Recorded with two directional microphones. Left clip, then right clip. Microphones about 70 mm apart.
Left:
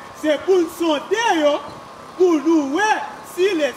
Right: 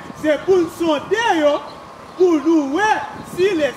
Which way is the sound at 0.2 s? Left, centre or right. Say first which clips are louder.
Right 1 dB; left.